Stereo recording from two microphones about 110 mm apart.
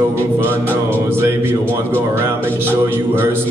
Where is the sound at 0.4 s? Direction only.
20° right (ahead or behind).